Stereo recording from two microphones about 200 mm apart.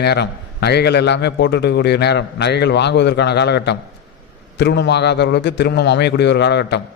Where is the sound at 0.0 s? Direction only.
55° left (ahead or behind).